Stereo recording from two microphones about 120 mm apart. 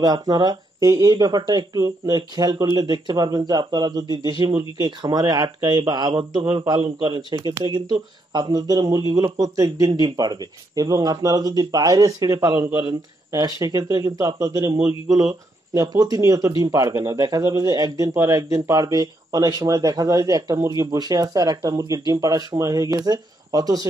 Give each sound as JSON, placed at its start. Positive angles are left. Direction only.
{"t": 0.0, "sound": "speech", "side_deg": -35}